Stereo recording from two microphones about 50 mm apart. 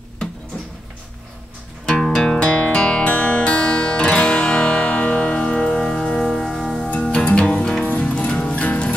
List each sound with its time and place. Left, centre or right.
2.0 s music: centre
6.9 s music: centre